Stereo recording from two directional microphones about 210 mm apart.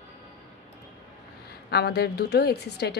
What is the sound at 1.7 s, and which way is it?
Speech, 50° left (ahead or behind).